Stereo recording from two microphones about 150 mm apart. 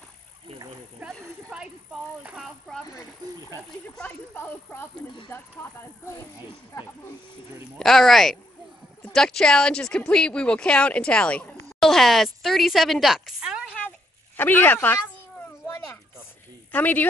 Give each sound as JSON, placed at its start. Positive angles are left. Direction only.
{"t": 1.0, "sound": "a sound", "side_deg": -5}
{"t": 2.2, "sound": "speech", "side_deg": -5}
{"t": 3.9, "sound": "speech", "side_deg": 10}
{"t": 7.8, "sound": "speech", "side_deg": 0}
{"t": 13.7, "sound": "a sound", "side_deg": 10}
{"t": 16.7, "sound": "speech", "side_deg": 10}